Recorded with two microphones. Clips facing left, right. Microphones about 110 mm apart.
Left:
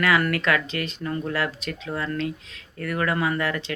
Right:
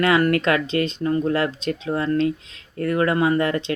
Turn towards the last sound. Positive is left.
turn(degrees=-30)  # may be behind; listen again after turning